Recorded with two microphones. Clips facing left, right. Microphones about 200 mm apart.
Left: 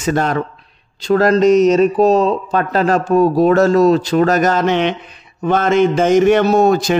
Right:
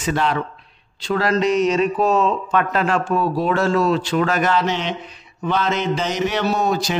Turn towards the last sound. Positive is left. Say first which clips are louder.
# left 8 dB
turn(degrees=50)  # may be behind; listen again after turning